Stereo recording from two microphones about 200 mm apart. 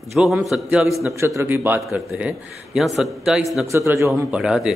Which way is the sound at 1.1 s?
15° right (ahead or behind).